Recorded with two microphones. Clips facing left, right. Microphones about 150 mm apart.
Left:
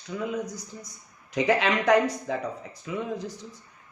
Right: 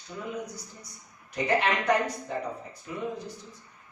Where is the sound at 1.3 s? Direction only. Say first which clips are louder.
Left 3 dB; 90° left.